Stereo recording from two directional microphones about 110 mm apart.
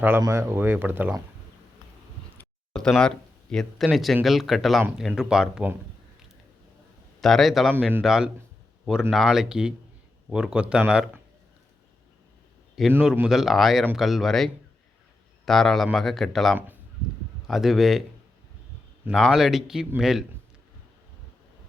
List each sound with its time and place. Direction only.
0.2 s speech: 30° right (ahead or behind)
2.7 s speech: 5° left (ahead or behind)
7.2 s speech: centre (ahead or behind)
9.0 s speech: 5° left (ahead or behind)
12.8 s a man's voice: centre (ahead or behind)
19.1 s speech: centre (ahead or behind)